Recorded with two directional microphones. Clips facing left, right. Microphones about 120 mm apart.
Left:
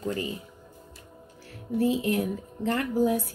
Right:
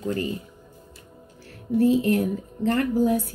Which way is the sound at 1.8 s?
5° left (ahead or behind).